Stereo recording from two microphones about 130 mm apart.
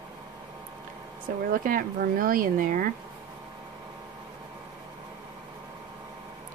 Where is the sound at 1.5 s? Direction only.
90° right.